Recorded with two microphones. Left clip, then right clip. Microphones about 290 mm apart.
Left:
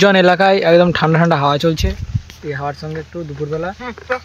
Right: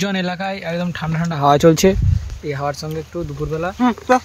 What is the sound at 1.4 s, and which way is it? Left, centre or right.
Speech, centre.